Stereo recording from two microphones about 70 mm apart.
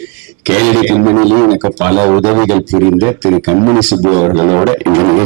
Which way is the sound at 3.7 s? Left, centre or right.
Right.